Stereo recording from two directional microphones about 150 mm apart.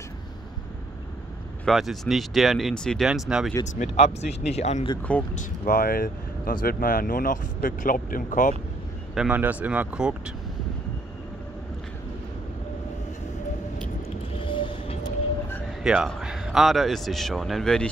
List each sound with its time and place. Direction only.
1.7 s a man's voice: centre (ahead or behind)
3.9 s speech: 45° left (ahead or behind)
5.3 s speech: 75° left (ahead or behind)
9.1 s speech: 5° right (ahead or behind)
14.4 s vehicle: 35° left (ahead or behind)
15.8 s a man's voice: 5° right (ahead or behind)